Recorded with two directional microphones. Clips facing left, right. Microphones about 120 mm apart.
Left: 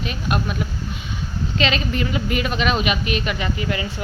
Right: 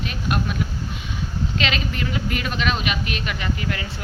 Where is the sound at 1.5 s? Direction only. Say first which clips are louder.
Left 6 dB; centre (ahead or behind).